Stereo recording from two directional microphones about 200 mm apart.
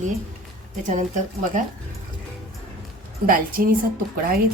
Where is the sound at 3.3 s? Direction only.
45° right (ahead or behind).